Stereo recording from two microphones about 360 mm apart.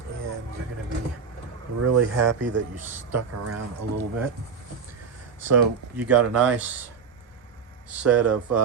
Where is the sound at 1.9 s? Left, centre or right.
Right.